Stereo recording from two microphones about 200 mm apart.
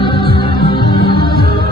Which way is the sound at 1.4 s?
50° right (ahead or behind).